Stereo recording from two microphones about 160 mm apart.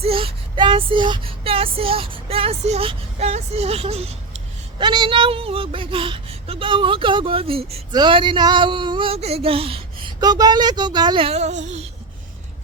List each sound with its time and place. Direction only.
0.0 s child singing: 35° right (ahead or behind)
4.8 s speech: 30° right (ahead or behind); by 11.9 s 45° right (ahead or behind)